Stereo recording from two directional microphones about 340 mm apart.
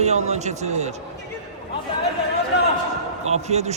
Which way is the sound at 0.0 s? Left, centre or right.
Centre.